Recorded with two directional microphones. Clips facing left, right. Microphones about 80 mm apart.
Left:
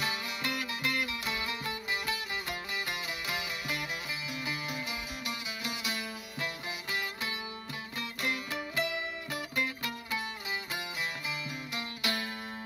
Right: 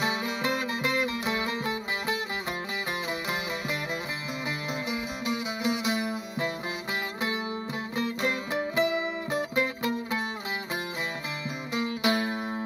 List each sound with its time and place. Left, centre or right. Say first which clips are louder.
0.0 s music: right 7 dB; right
5.2 s music: right 9 dB; right
8.0 s music: right 6 dB; right
11.7 s music: right 10 dB; right